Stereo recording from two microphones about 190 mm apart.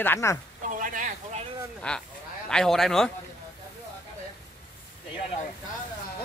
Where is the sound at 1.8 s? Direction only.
5° left (ahead or behind).